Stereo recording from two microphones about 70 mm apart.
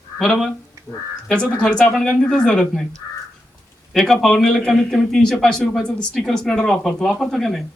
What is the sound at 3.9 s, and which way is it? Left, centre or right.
A man's voice, centre.